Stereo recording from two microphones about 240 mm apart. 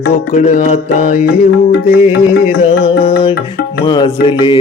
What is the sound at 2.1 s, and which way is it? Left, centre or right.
Music, centre.